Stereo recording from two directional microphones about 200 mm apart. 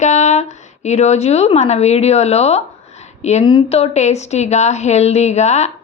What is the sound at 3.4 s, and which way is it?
A woman's voice, 25° left (ahead or behind).